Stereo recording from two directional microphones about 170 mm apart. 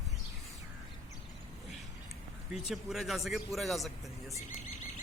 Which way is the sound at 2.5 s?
Centre (ahead or behind).